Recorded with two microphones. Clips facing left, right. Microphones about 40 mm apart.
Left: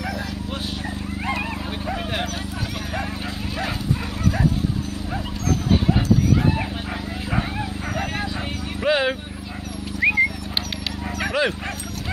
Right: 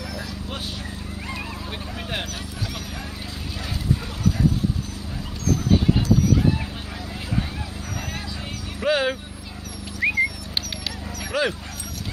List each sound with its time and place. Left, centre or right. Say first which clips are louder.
8.8 s horse: left 1 dB; centre
9.9 s horse: left 3 dB; left
11.4 s dog: left 1 dB; centre